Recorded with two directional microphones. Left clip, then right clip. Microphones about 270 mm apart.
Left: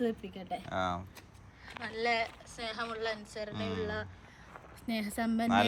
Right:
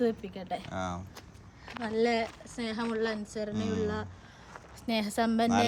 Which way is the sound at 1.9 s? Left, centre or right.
Right.